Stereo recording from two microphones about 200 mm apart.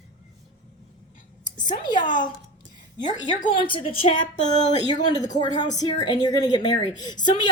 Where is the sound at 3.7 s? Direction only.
25° left (ahead or behind).